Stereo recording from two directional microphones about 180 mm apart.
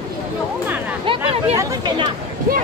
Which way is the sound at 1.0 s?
30° right (ahead or behind).